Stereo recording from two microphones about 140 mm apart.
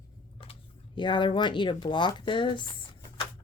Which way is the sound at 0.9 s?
35° left (ahead or behind).